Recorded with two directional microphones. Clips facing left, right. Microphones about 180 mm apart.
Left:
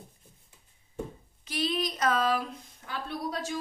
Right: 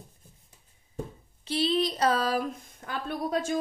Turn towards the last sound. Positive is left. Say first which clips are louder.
# right 5 dB
turn(degrees=-50)  # may be behind; listen again after turning